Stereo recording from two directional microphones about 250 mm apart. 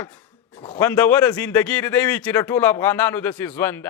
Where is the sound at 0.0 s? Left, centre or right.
Centre.